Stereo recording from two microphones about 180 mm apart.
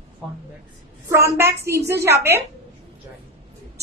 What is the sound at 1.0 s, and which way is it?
A woman's voice, 15° right (ahead or behind).